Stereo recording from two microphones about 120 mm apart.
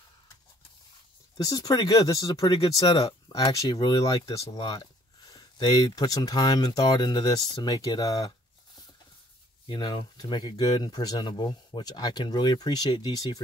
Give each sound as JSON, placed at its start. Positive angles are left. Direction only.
{"t": 1.4, "sound": "speech", "side_deg": 30}
{"t": 3.6, "sound": "speech", "side_deg": 30}
{"t": 9.7, "sound": "speech", "side_deg": 45}